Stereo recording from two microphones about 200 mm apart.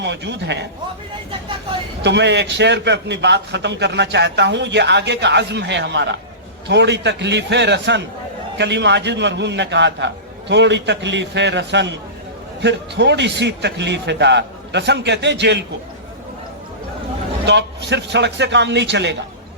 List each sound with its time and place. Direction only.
0.0 s a man's voice: 60° right (ahead or behind)
2.0 s a man's voice: 60° right (ahead or behind)
17.4 s a man's voice: 60° right (ahead or behind)